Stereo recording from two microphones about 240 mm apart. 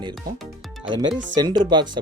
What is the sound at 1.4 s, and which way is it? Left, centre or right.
Speech, centre.